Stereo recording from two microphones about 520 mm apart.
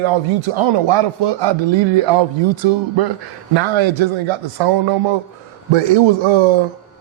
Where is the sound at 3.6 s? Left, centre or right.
Right.